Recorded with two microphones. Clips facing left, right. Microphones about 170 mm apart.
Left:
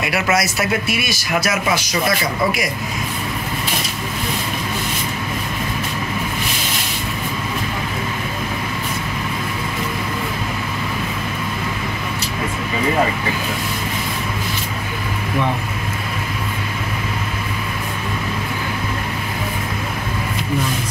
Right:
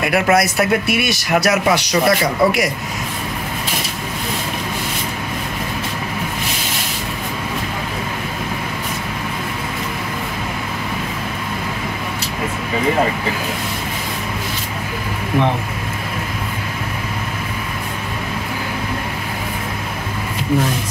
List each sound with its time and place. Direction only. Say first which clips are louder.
0.0 s speech: right 4 dB; 55° right (ahead or behind); by 2.7 s 70° right (ahead or behind)